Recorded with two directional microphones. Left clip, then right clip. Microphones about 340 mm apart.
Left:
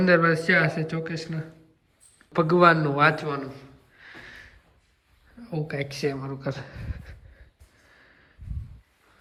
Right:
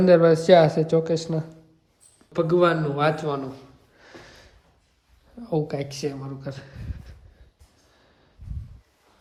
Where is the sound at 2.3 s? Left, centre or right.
Centre.